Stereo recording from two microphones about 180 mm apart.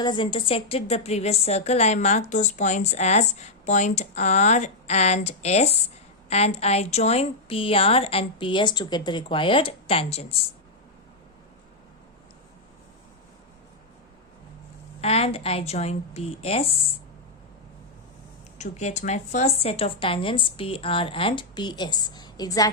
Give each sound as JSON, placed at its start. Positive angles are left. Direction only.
{"t": 0.0, "sound": "a woman's voice", "side_deg": 25}
{"t": 15.0, "sound": "a woman's voice", "side_deg": 35}
{"t": 18.5, "sound": "speech", "side_deg": 40}